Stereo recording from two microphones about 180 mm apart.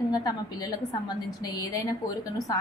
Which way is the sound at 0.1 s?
20° left (ahead or behind).